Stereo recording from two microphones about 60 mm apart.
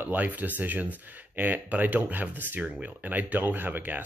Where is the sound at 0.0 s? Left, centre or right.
Right.